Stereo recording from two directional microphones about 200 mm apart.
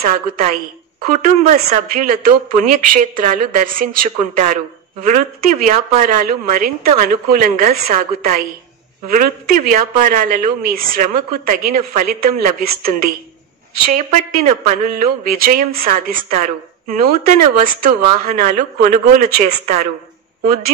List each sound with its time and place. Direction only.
1.1 s a woman's voice: 35° right (ahead or behind)
13.8 s speech: 35° right (ahead or behind)
15.0 s a woman's voice: 45° right (ahead or behind)